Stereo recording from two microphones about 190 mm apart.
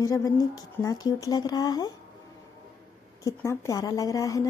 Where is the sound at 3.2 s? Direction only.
15° left (ahead or behind).